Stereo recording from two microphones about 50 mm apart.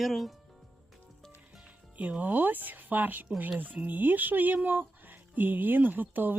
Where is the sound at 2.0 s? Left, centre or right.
Right.